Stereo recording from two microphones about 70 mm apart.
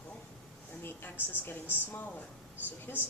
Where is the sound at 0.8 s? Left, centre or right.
Left.